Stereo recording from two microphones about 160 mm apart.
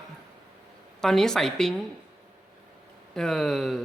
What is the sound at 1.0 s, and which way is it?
Speech, centre (ahead or behind).